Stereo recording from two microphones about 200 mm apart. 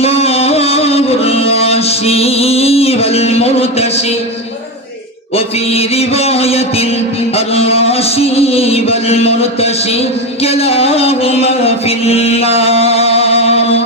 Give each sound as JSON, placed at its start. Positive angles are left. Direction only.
{"t": 0.0, "sound": "music", "side_deg": 30}
{"t": 5.7, "sound": "a sound", "side_deg": 30}
{"t": 10.4, "sound": "music", "side_deg": 30}